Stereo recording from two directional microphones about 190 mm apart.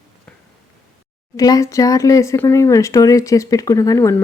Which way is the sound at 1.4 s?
20° left (ahead or behind).